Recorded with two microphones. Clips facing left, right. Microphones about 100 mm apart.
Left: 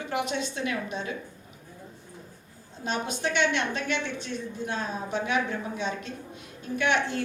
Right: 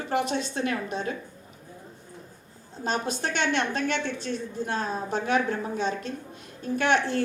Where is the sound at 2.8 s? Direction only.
40° right (ahead or behind).